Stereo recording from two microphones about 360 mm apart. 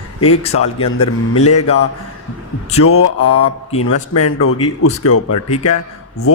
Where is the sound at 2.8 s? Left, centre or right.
Left.